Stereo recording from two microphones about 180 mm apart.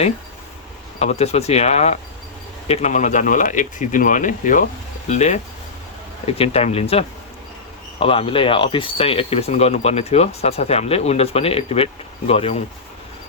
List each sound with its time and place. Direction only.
0.9 s speech: 35° left (ahead or behind)